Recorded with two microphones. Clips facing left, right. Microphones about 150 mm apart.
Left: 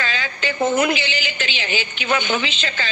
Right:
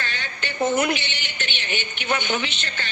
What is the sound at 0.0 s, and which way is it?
A woman's voice, 90° left.